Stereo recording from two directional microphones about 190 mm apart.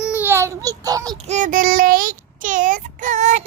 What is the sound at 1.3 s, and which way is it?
Child singing, 40° right (ahead or behind).